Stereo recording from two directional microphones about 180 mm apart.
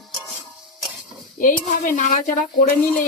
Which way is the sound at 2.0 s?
45° left (ahead or behind).